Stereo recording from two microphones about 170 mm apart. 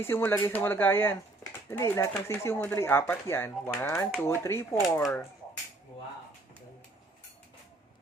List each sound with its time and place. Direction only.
0.0 s speech: 15° left (ahead or behind)